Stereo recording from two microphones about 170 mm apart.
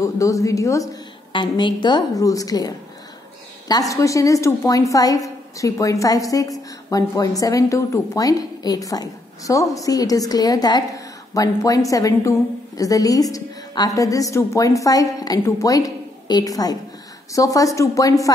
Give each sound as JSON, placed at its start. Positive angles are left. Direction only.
{"t": 0.0, "sound": "a woman's voice", "side_deg": 20}
{"t": 3.9, "sound": "a woman's voice", "side_deg": 20}